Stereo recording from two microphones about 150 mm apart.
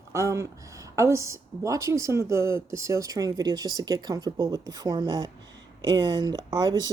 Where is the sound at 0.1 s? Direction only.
20° right (ahead or behind).